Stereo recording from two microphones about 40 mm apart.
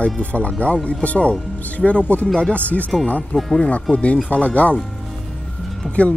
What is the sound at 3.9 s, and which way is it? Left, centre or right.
Speech, left.